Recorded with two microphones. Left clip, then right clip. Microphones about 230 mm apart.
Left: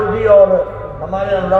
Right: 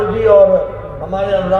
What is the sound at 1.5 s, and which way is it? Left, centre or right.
Speech, right.